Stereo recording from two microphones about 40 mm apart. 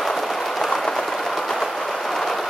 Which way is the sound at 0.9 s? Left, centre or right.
Centre.